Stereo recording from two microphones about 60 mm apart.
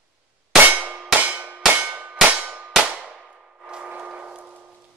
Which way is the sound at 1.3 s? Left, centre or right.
Right.